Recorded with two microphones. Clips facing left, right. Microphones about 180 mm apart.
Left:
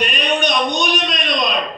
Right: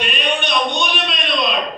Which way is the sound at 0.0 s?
40° left (ahead or behind).